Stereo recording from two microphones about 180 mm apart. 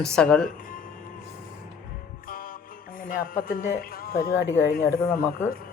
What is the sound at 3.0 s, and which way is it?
Speech, 50° left (ahead or behind).